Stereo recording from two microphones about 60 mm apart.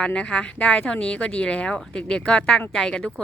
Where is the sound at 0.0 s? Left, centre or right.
Centre.